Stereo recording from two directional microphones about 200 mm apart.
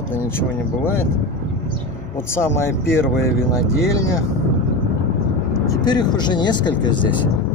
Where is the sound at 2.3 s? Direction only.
10° left (ahead or behind).